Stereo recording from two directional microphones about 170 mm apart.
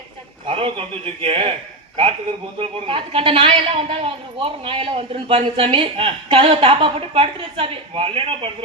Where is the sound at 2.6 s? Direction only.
35° right (ahead or behind).